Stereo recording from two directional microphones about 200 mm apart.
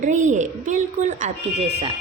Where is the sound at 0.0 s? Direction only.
40° right (ahead or behind).